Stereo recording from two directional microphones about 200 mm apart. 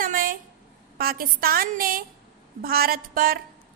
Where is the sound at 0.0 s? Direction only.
45° right (ahead or behind).